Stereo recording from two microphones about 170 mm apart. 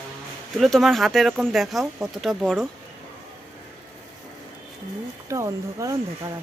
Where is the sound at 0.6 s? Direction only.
Centre (ahead or behind).